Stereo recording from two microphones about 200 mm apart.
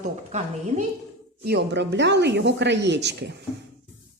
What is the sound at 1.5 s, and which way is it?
A woman's voice, 60° right (ahead or behind).